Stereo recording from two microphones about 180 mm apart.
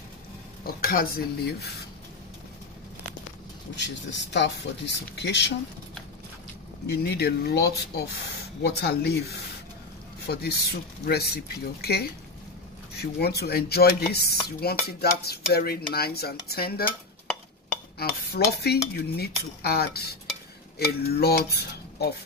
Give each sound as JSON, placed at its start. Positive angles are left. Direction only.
{"t": 0.7, "sound": "speech", "side_deg": 55}
{"t": 3.7, "sound": "speech", "side_deg": 75}
{"t": 6.9, "sound": "speech", "side_deg": 65}
{"t": 17.9, "sound": "speech", "side_deg": 60}